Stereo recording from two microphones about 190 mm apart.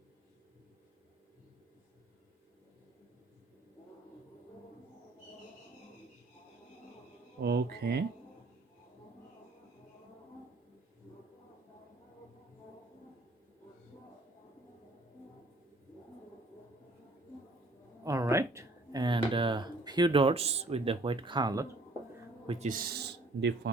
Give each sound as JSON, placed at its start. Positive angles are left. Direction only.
{"t": 7.4, "sound": "speech", "side_deg": -60}
{"t": 18.0, "sound": "a sound", "side_deg": -15}
{"t": 22.4, "sound": "speech", "side_deg": -40}